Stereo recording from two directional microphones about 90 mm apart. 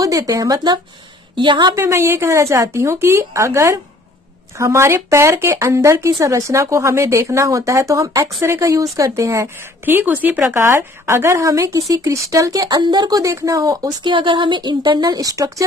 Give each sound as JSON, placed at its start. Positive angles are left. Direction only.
{"t": 0.0, "sound": "speech", "side_deg": -40}
{"t": 1.3, "sound": "a woman's voice", "side_deg": -65}
{"t": 1.8, "sound": "speech", "side_deg": -30}
{"t": 13.2, "sound": "speech", "side_deg": -35}
{"t": 14.0, "sound": "a woman's voice", "side_deg": -65}